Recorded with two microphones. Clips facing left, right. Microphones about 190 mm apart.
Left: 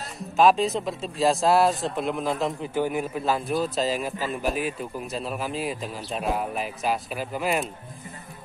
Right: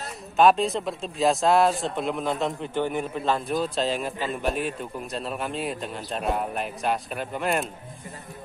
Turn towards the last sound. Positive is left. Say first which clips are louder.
# even
turn(degrees=0)  # may be behind; listen again after turning